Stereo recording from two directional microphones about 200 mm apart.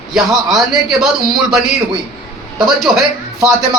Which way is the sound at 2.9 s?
15° right (ahead or behind).